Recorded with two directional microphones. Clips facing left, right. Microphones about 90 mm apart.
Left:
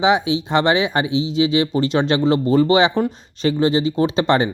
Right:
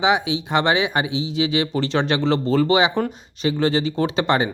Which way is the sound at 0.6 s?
20° right (ahead or behind).